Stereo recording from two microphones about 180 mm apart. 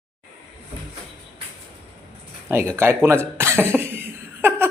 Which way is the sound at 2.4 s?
15° right (ahead or behind).